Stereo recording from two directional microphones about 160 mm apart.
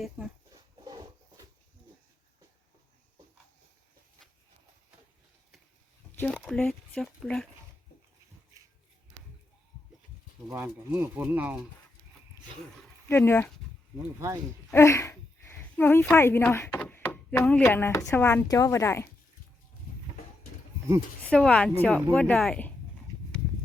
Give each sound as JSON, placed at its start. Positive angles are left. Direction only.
{"t": 6.3, "sound": "speech", "side_deg": 0}
{"t": 10.5, "sound": "speech", "side_deg": -15}
{"t": 13.1, "sound": "speech", "side_deg": 15}
{"t": 14.7, "sound": "speech", "side_deg": 15}
{"t": 21.2, "sound": "speech", "side_deg": 5}